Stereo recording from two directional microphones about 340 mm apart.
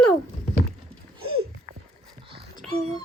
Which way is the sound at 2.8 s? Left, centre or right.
Centre.